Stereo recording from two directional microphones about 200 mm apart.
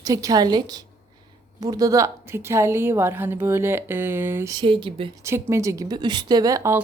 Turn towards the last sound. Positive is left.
turn(degrees=-15)  # may be behind; listen again after turning